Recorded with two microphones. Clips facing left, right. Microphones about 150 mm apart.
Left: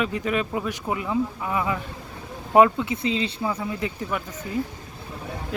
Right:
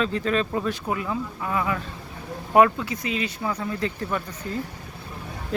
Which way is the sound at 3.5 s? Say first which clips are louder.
Even; 15° left (ahead or behind).